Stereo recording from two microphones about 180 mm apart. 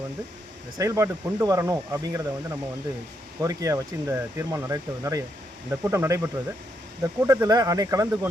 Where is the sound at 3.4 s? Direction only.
15° right (ahead or behind).